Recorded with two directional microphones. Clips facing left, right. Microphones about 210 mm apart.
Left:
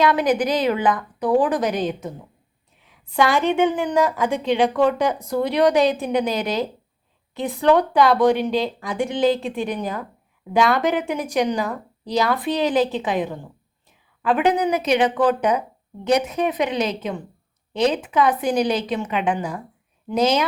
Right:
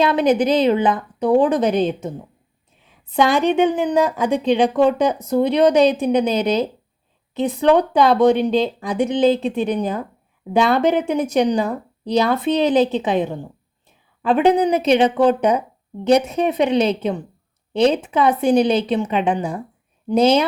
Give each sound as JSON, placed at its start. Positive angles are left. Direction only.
{"t": 0.0, "sound": "a woman's voice", "side_deg": -25}